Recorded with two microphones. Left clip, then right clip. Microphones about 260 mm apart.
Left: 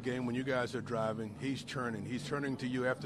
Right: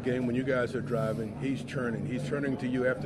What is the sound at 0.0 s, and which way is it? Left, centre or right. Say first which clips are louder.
A man's voice: right 7 dB; left.